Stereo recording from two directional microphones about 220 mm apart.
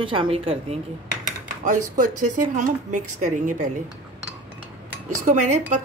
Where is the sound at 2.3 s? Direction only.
35° right (ahead or behind).